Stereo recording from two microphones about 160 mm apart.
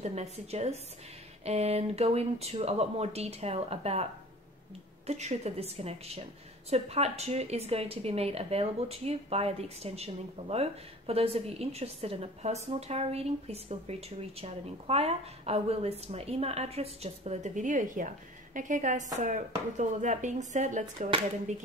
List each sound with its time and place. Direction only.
0.0 s a woman's voice: 40° right (ahead or behind)